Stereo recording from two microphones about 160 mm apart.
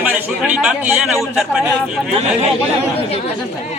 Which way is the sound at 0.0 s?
10° right (ahead or behind).